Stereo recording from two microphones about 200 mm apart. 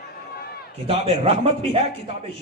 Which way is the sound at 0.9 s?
30° right (ahead or behind).